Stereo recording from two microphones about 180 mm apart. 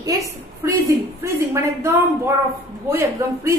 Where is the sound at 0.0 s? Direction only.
20° right (ahead or behind).